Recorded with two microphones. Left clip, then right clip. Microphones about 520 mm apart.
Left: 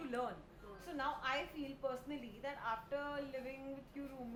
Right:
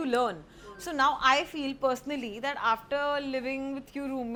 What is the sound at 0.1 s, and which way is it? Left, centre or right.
A woman's voice, right.